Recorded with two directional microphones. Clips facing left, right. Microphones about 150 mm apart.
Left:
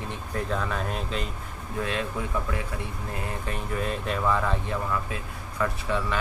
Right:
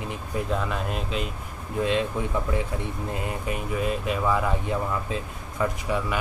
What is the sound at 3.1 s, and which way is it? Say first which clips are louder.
Speech: right 1 dB; 10° right (ahead or behind).